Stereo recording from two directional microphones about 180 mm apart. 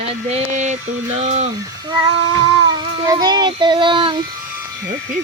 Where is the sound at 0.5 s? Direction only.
40° right (ahead or behind).